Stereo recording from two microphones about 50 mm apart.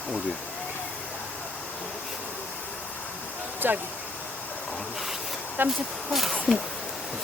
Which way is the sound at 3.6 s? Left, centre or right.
Right.